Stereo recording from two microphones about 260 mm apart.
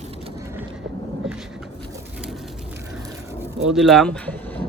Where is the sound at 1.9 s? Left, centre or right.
Centre.